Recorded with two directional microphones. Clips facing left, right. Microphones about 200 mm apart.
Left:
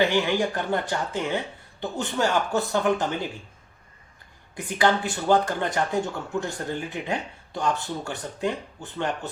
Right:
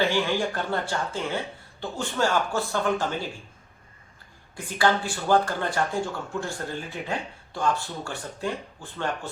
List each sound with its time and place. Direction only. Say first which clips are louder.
0.0 s speech: left 2 dB; 15° left (ahead or behind)
4.5 s speech: left 1 dB; 20° left (ahead or behind)